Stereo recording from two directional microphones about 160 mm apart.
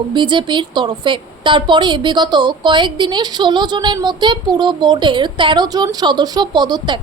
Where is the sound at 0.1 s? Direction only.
30° right (ahead or behind).